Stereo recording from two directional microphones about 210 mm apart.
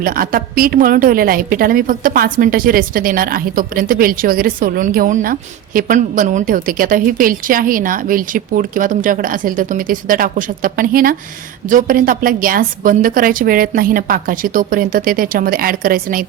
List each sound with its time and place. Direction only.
0.0 s a woman's voice: 45° right (ahead or behind)